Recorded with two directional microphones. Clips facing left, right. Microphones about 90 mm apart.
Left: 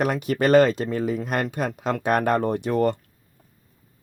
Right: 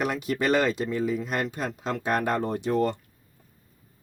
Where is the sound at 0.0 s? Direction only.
50° left (ahead or behind).